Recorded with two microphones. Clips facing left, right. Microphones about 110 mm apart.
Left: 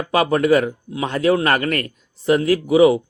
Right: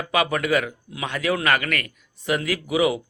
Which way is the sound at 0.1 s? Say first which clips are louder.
Left 6 dB; 35° left (ahead or behind).